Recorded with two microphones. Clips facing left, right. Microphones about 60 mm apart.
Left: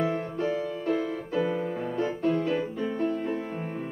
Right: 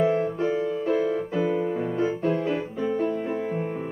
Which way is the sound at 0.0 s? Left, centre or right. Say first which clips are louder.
Right 5 dB; centre.